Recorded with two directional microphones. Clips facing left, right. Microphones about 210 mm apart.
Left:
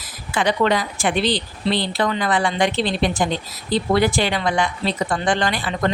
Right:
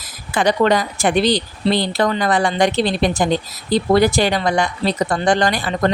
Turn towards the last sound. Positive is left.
turn(degrees=-40)  # may be behind; listen again after turning